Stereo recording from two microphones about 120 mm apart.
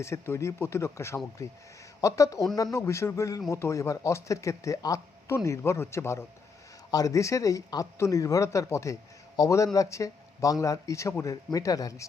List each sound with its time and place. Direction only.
0.0 s speech: 25° left (ahead or behind)